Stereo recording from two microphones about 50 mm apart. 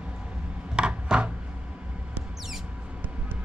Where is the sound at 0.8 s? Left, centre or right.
Centre.